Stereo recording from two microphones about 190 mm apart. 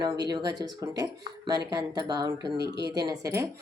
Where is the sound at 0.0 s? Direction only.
20° right (ahead or behind).